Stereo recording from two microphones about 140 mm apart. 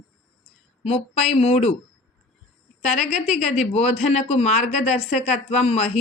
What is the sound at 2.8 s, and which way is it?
Speech, 55° left (ahead or behind).